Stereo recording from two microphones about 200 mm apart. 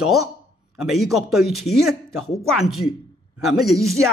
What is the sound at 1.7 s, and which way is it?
Speech, 90° left.